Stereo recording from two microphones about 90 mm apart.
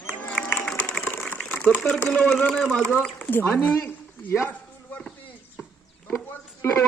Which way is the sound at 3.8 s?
20° left (ahead or behind).